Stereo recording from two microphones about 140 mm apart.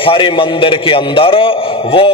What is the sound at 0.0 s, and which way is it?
A man's voice, 40° left (ahead or behind).